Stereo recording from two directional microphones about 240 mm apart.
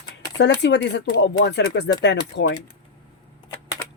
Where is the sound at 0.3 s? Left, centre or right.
Left.